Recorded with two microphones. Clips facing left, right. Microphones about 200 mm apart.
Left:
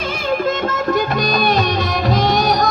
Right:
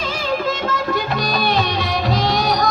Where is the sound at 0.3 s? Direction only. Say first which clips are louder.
Left 3 dB; 50° left (ahead or behind).